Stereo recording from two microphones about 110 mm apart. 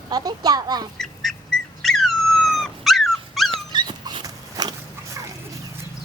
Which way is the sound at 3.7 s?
40° right (ahead or behind).